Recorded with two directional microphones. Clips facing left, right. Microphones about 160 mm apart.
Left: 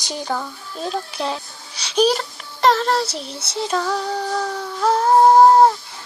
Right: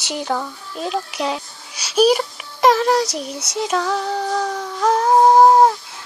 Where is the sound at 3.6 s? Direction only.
Centre (ahead or behind).